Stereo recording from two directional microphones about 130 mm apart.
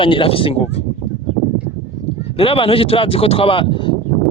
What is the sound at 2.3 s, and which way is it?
Speech, 45° left (ahead or behind).